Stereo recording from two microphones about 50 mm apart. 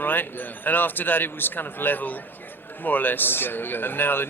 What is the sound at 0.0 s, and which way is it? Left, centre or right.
A man's voice, left.